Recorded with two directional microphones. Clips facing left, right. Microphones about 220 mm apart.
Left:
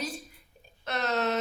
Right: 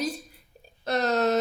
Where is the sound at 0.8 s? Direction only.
40° right (ahead or behind).